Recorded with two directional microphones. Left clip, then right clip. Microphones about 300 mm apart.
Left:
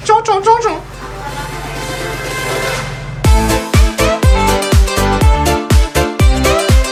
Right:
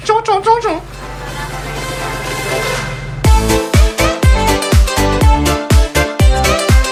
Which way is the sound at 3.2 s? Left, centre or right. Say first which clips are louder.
Right 1 dB; centre.